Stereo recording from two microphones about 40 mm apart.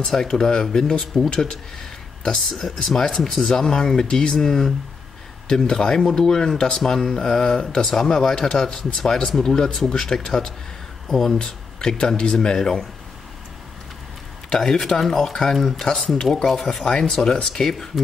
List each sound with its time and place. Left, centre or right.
0.0 s speech: centre
2.5 s speech: centre
11.3 s speech: centre
14.6 s speech: centre